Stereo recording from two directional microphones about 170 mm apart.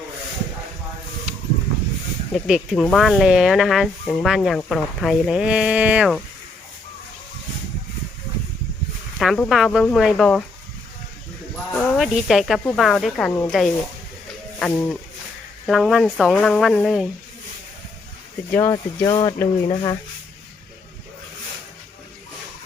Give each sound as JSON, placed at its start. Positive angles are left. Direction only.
{"t": 2.3, "sound": "speech", "side_deg": 0}
{"t": 9.1, "sound": "speech", "side_deg": 0}
{"t": 11.7, "sound": "speech", "side_deg": 5}
{"t": 18.5, "sound": "speech", "side_deg": 20}